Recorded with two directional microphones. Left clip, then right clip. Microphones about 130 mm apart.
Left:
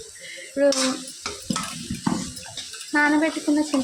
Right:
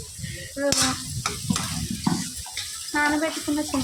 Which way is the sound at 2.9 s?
30° left (ahead or behind).